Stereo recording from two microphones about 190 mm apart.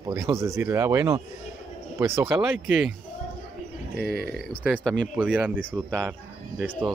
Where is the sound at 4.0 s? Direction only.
55° left (ahead or behind).